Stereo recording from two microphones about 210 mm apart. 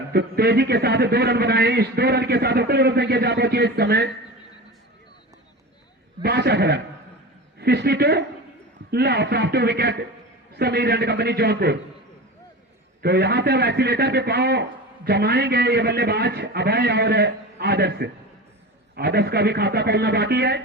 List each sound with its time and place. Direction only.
0.1 s a man's voice: 50° right (ahead or behind)
6.2 s a man's voice: 50° right (ahead or behind)
13.0 s a man's voice: 50° right (ahead or behind)